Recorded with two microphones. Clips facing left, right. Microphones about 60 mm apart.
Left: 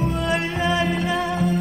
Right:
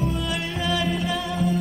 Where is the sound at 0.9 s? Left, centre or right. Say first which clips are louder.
Left 3 dB; left.